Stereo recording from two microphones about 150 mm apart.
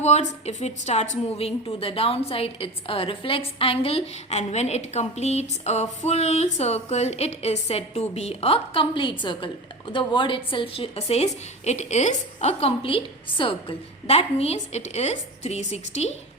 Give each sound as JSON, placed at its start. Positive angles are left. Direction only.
{"t": 0.0, "sound": "a woman's voice", "side_deg": 45}